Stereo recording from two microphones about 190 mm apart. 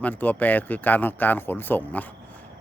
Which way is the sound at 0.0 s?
10° left (ahead or behind).